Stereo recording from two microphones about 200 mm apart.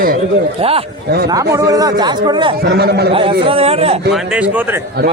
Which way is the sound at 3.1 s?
25° right (ahead or behind).